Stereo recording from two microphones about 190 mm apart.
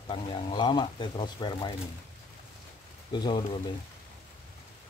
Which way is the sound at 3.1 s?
25° left (ahead or behind).